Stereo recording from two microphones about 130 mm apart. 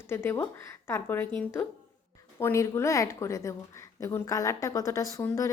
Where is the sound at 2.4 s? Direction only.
20° left (ahead or behind).